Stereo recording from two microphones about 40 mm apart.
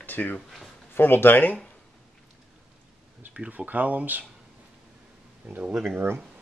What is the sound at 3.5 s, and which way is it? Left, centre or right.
Speech, right.